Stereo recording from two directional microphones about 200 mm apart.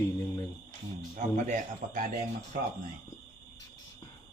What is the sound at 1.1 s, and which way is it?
Speech, 40° right (ahead or behind).